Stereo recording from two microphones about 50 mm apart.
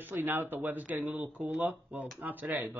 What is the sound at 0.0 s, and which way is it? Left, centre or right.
Speech, right.